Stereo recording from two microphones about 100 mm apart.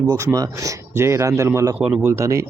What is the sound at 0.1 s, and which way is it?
Speech, 35° right (ahead or behind).